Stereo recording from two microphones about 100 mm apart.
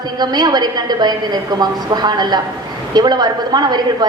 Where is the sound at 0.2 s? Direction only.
45° right (ahead or behind).